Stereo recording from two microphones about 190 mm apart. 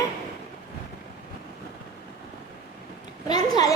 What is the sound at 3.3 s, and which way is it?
Speech, 20° left (ahead or behind).